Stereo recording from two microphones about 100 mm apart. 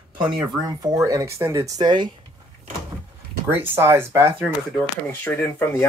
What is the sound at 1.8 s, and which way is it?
Speech, 50° right (ahead or behind).